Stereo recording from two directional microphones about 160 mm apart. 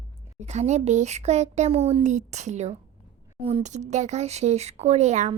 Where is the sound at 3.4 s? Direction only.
35° right (ahead or behind).